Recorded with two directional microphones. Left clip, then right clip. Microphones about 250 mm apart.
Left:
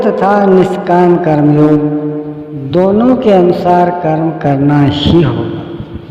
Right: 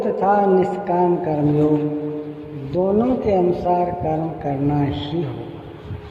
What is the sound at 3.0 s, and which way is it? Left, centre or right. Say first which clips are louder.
A man's voice: left 10 dB; left.